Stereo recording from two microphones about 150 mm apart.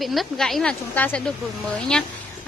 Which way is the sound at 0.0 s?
Centre (ahead or behind).